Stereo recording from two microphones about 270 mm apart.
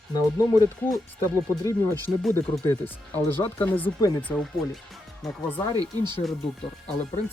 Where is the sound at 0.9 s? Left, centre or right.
Centre.